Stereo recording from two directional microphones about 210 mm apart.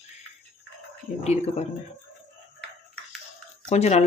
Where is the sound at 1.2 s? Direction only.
30° left (ahead or behind).